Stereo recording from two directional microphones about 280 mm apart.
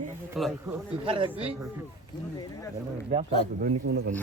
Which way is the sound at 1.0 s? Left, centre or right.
Centre.